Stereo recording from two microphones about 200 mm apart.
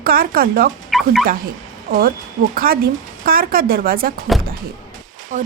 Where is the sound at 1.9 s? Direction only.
45° right (ahead or behind).